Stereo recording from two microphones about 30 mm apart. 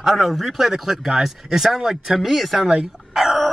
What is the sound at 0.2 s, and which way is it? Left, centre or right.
A man's voice, centre.